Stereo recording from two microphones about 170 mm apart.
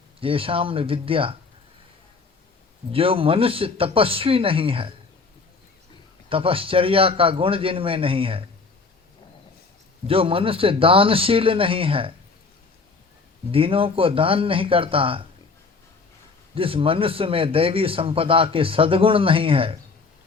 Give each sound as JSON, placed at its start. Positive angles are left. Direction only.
{"t": 0.2, "sound": "a man's voice", "side_deg": -30}
{"t": 2.9, "sound": "a man's voice", "side_deg": -35}
{"t": 6.2, "sound": "a man's voice", "side_deg": -35}
{"t": 10.1, "sound": "a man's voice", "side_deg": -35}
{"t": 13.5, "sound": "a man's voice", "side_deg": -35}
{"t": 16.6, "sound": "a man's voice", "side_deg": -30}